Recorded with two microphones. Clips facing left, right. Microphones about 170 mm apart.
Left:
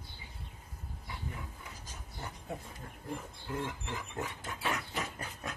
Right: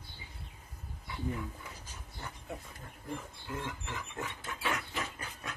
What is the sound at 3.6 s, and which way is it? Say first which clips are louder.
Pig: left 2 dB; 35° left (ahead or behind).